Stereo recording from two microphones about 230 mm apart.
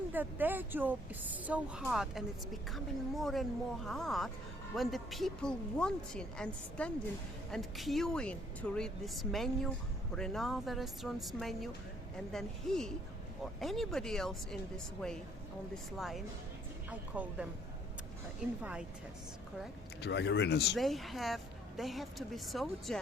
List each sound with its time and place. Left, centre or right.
0.1 s a woman's voice: centre
15.7 s speech: centre
18.6 s speech: centre
20.0 s speech: left
20.7 s speech: centre